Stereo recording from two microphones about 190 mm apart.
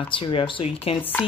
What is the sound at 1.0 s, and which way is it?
Speech, 10° left (ahead or behind).